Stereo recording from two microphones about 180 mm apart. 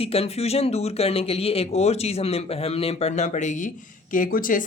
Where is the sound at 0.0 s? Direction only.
35° left (ahead or behind).